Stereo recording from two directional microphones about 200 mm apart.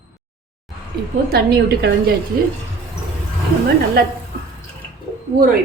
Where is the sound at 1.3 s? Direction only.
55° right (ahead or behind).